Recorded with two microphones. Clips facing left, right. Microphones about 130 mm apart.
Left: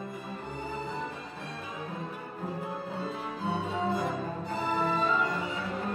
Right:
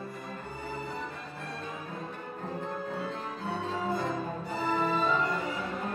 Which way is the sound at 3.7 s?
20° left (ahead or behind).